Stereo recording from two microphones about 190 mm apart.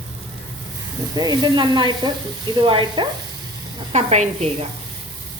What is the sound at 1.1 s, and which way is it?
Speech, 20° right (ahead or behind).